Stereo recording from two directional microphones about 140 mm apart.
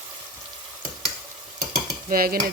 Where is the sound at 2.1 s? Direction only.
90° right.